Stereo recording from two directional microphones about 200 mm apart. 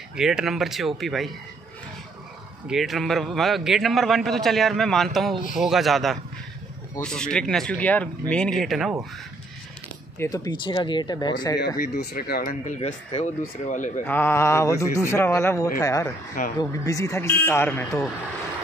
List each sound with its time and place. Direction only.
0.1 s a man's voice: 5° right (ahead or behind)
2.7 s a man's voice: centre (ahead or behind)
10.1 s speech: 15° left (ahead or behind)
11.6 s speech: 50° left (ahead or behind)
14.0 s a man's voice: 10° left (ahead or behind)